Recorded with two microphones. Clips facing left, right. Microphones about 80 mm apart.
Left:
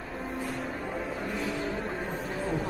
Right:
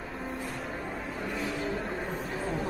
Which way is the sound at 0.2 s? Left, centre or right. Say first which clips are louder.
Left 3 dB; centre.